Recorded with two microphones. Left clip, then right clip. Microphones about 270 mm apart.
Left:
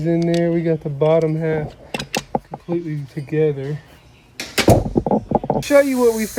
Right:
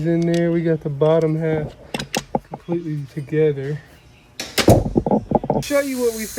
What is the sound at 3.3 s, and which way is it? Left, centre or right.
Speech, centre.